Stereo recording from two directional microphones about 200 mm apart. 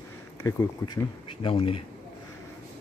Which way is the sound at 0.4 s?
15° left (ahead or behind).